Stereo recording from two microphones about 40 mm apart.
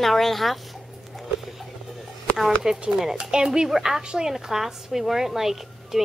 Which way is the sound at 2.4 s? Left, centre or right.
Centre.